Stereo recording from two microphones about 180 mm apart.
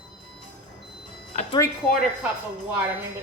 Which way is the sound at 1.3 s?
45° left (ahead or behind).